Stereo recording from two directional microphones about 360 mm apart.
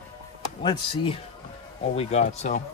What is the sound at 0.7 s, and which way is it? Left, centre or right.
Speech, centre.